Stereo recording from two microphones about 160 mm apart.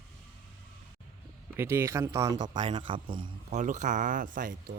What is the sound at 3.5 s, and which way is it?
Speech, 50° right (ahead or behind).